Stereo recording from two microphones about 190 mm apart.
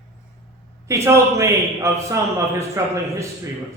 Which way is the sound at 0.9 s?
15° right (ahead or behind).